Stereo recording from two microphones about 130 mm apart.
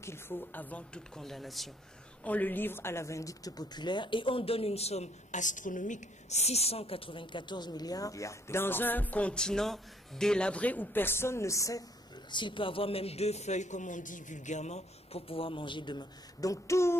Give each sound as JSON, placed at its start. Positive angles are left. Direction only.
{"t": 0.0, "sound": "speech", "side_deg": 20}
{"t": 2.2, "sound": "speech", "side_deg": 10}
{"t": 12.3, "sound": "a man's voice", "side_deg": 35}